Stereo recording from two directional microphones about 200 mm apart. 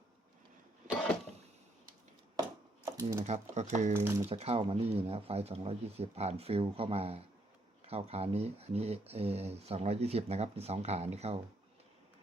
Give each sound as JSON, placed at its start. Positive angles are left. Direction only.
{"t": 3.0, "sound": "speech", "side_deg": -15}
{"t": 3.2, "sound": "speech", "side_deg": -35}
{"t": 3.9, "sound": "speech", "side_deg": -10}
{"t": 4.3, "sound": "speech", "side_deg": -30}